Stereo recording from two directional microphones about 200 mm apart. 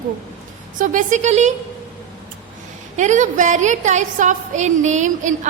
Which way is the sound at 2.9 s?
35° right (ahead or behind).